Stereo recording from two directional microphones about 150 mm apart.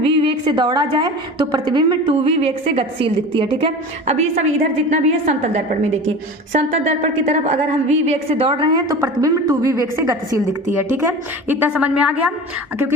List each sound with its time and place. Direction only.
0.0 s a woman's voice: 35° right (ahead or behind)
2.2 s a woman's voice: 40° right (ahead or behind); by 12.3 s 10° right (ahead or behind)